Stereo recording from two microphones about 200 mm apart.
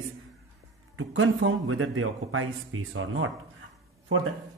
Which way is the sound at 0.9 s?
85° right.